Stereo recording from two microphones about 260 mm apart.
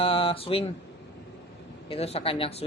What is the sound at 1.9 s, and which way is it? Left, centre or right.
Speech, left.